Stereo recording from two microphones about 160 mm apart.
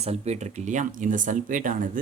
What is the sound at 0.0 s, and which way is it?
Speech, 40° right (ahead or behind).